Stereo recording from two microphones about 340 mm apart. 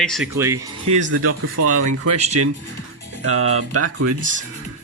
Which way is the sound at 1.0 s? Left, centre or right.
Right.